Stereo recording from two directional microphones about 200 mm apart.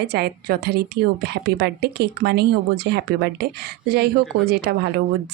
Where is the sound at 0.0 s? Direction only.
55° right (ahead or behind).